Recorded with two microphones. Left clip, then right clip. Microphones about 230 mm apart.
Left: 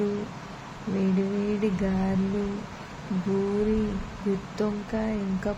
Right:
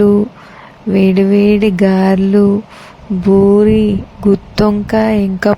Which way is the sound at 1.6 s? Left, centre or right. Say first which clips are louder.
Right 16 dB; right.